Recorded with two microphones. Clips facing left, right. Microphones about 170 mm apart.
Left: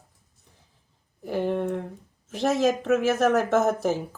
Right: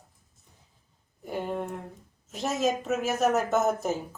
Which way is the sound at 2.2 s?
90° left.